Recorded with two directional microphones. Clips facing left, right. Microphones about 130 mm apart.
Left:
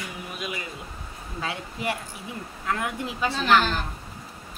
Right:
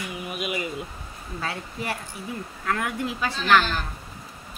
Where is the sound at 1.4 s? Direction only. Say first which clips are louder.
Left 2 dB; 15° left (ahead or behind).